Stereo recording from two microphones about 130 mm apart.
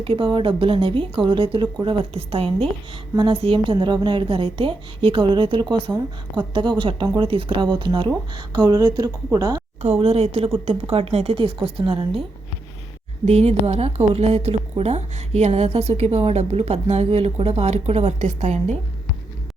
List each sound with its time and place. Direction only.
0.0 s a woman's voice: 45° right (ahead or behind); by 9.6 s 25° right (ahead or behind)
9.8 s a woman's voice: 55° right (ahead or behind)
11.3 s a woman's voice: 40° right (ahead or behind)
13.2 s speech: 55° right (ahead or behind)